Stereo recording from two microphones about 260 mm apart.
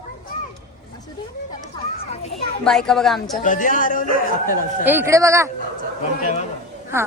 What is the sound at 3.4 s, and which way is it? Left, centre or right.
Speech, left.